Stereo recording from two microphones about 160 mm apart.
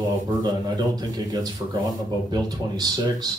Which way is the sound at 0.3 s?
25° right (ahead or behind).